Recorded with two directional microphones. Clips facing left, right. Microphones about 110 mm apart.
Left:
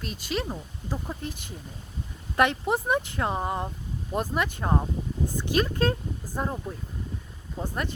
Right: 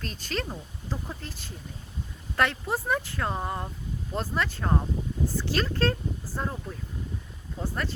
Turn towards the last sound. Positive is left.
turn(degrees=20)  # may be behind; listen again after turning